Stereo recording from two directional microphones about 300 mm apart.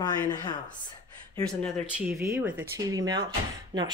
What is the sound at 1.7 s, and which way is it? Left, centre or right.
Speech, centre.